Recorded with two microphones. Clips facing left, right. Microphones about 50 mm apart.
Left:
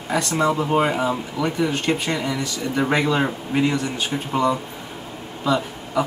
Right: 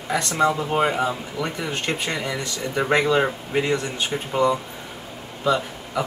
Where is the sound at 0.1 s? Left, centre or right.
Centre.